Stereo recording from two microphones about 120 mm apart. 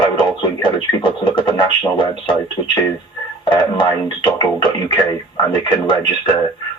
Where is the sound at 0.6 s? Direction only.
40° left (ahead or behind).